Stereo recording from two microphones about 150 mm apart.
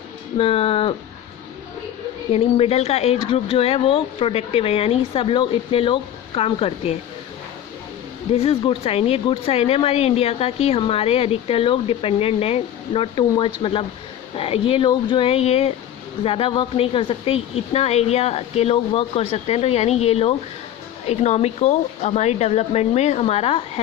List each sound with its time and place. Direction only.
0.3 s speech: 40° left (ahead or behind)
2.3 s speech: 45° left (ahead or behind)
8.3 s speech: 40° left (ahead or behind)